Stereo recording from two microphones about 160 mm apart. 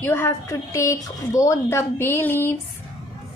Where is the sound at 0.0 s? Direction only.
15° left (ahead or behind).